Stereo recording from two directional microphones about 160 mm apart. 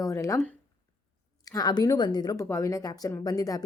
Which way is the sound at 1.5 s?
25° left (ahead or behind).